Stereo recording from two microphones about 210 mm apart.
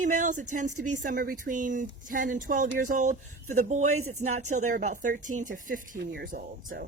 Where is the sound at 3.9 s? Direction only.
90° right.